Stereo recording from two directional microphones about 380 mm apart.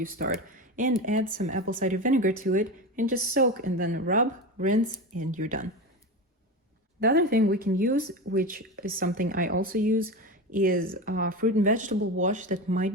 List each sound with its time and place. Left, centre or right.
0.2 s speech: right
7.0 s speech: right